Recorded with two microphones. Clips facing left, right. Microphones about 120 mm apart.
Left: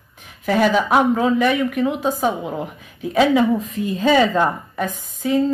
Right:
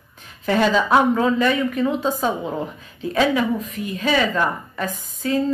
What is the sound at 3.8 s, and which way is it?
A woman's voice, 30° left (ahead or behind).